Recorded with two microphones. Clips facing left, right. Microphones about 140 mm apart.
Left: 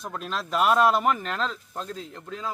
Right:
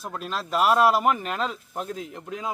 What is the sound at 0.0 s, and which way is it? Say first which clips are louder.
Speech: right 1 dB; 5° right (ahead or behind).